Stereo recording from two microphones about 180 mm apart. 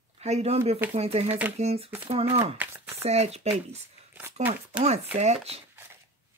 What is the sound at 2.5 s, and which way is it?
Speech, 10° right (ahead or behind).